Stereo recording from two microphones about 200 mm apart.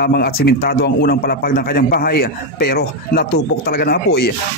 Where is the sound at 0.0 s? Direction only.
50° left (ahead or behind).